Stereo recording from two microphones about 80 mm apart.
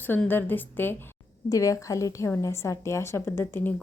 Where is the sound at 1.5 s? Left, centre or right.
Left.